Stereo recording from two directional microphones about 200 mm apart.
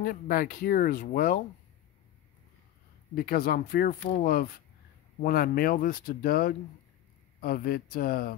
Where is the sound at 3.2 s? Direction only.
50° left (ahead or behind).